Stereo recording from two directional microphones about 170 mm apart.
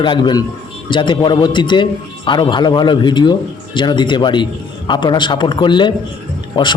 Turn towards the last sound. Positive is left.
turn(degrees=25)  # may be behind; listen again after turning